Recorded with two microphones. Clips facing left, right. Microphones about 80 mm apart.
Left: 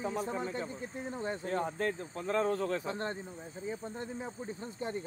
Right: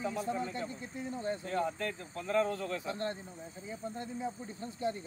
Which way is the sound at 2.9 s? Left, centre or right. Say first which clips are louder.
Even; left.